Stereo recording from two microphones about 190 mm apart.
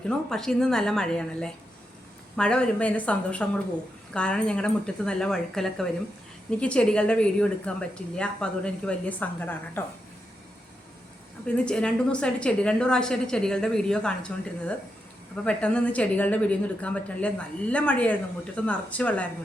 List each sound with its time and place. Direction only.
0.1 s a woman's voice: 5° left (ahead or behind)
11.4 s a woman's voice: 5° left (ahead or behind)
15.4 s a woman's voice: 5° left (ahead or behind)